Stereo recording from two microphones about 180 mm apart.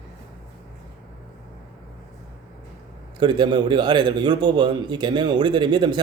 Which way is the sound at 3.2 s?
25° right (ahead or behind).